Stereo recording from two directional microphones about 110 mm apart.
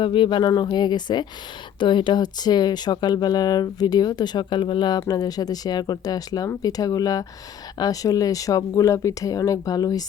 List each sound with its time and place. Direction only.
0.0 s speech: 50° left (ahead or behind)